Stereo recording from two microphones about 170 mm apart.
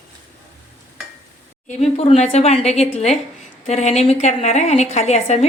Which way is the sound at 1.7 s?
40° left (ahead or behind).